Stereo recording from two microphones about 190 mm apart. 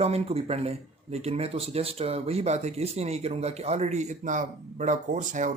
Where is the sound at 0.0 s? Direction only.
30° right (ahead or behind).